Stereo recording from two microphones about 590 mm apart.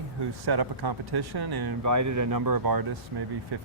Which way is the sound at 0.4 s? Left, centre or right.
Right.